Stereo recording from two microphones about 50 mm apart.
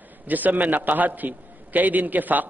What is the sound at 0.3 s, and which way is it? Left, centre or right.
A man's voice, right.